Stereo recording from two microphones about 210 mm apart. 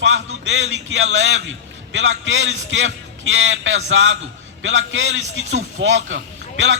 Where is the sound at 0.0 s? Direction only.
60° right (ahead or behind).